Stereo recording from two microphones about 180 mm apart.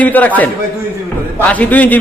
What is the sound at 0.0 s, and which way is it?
A man's voice, 10° left (ahead or behind).